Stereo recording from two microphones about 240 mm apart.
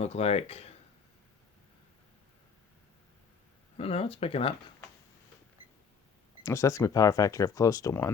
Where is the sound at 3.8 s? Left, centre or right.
Left.